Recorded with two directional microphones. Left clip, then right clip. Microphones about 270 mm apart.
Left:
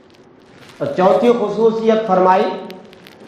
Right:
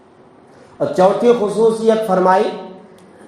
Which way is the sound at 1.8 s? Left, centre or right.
Right.